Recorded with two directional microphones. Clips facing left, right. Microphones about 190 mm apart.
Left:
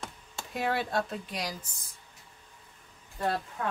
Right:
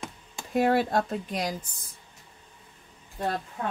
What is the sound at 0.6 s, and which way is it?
Speech, 45° right (ahead or behind).